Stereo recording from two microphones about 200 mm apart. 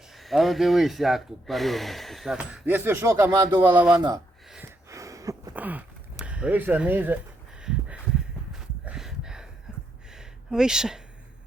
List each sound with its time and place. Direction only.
0.1 s speech: centre (ahead or behind)
3.9 s speech: 20° right (ahead or behind)
4.4 s gasp: 5° right (ahead or behind)
4.9 s a sound: 15° right (ahead or behind)